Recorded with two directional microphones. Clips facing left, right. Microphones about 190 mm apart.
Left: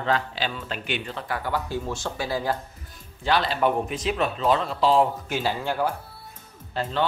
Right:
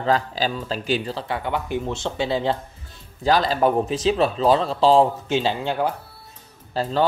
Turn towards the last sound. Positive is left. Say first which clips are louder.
# right 4 dB
turn(degrees=-35)  # may be behind; listen again after turning